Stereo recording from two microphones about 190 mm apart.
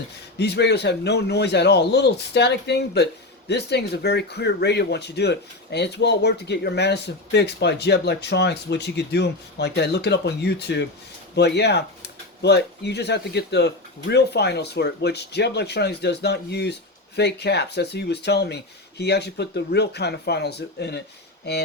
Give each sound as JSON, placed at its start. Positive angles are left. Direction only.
{"t": 0.3, "sound": "speech", "side_deg": 60}